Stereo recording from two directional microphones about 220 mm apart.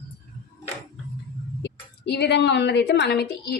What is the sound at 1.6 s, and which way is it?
A woman's voice, 50° left (ahead or behind).